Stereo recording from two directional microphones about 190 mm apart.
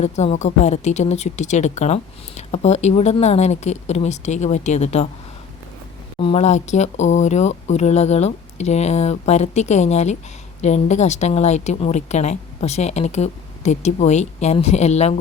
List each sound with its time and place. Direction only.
0.0 s speech: 35° left (ahead or behind)
6.1 s speech: 30° left (ahead or behind)